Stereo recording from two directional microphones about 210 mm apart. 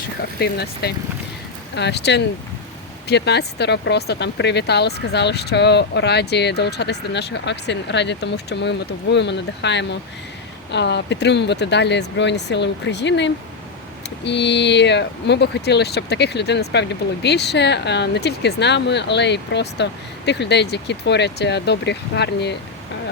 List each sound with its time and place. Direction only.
0.3 s speech: 50° left (ahead or behind)